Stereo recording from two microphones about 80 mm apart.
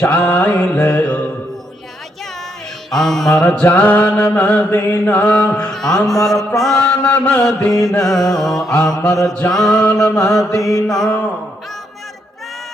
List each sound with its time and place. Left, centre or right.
0.0 s mantra: centre
2.9 s music: centre
3.4 s mantra: centre
5.5 s music: centre
7.0 s mantra: centre
8.0 s music: centre
9.0 s mantra: centre
10.2 s music: centre
10.5 s mantra: left
10.8 s music: centre